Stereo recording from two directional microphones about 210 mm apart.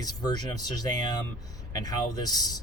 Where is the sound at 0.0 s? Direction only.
20° left (ahead or behind).